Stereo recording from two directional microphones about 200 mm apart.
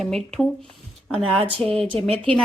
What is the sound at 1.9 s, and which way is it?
Speech, 30° right (ahead or behind).